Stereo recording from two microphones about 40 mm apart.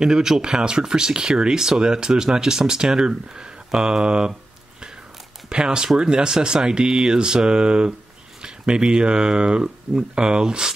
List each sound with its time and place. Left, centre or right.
0.0 s speech: centre
5.5 s speech: right